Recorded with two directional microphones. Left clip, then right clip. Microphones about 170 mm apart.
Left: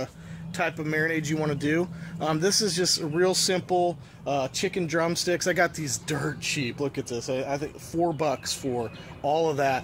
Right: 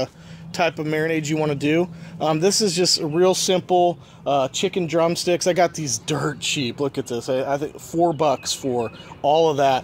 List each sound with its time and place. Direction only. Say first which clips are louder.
0.0 s speech: right 8 dB; 35° right (ahead or behind)
3.6 s speech: right 7 dB; 70° right (ahead or behind)
4.9 s speech: right 7 dB; 35° right (ahead or behind)
7.1 s speech: right 6 dB; 80° right
7.4 s speech: right 7 dB; 40° right (ahead or behind)